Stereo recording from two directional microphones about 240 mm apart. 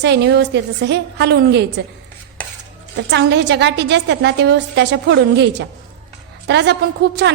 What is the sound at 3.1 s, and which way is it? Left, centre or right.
A woman's voice, right.